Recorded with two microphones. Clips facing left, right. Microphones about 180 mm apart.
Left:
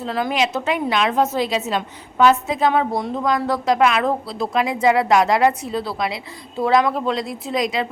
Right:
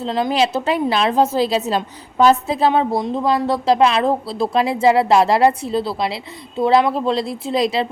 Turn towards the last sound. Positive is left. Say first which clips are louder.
# right 3 dB
turn(degrees=-30)  # may be behind; listen again after turning